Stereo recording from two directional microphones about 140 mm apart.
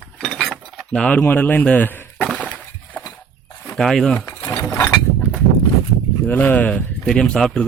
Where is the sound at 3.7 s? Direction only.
5° left (ahead or behind).